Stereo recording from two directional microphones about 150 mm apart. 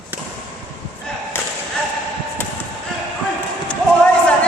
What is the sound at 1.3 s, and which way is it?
Whip, 15° left (ahead or behind).